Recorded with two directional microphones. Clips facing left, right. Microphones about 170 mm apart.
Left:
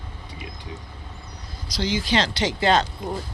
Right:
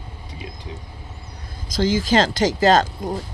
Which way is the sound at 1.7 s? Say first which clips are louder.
Right 5 dB; 45° right (ahead or behind).